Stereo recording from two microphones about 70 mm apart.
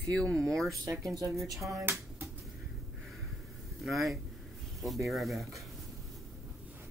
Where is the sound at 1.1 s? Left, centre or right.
Right.